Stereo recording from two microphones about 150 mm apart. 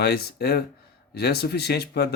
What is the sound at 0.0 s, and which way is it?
Speech, 90° left.